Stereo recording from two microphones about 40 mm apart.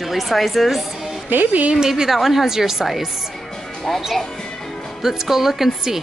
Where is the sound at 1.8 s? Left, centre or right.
Centre.